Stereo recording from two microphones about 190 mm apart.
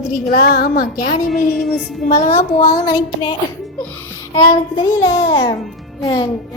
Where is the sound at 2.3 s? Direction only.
15° left (ahead or behind).